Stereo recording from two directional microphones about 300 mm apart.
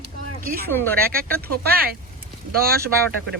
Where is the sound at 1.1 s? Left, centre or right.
Right.